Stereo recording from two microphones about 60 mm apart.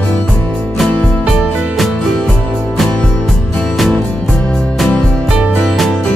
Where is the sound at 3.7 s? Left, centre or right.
Centre.